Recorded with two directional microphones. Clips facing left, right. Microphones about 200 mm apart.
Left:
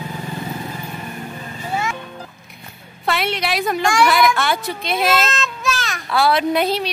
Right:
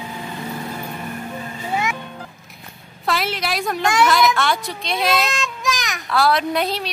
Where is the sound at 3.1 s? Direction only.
Centre (ahead or behind).